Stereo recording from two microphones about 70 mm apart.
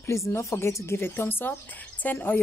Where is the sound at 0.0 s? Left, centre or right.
Left.